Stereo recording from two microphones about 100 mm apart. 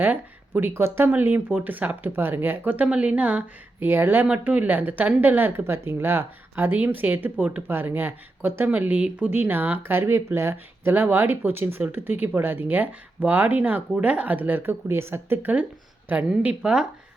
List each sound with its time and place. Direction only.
0.0 s a woman's voice: 20° right (ahead or behind)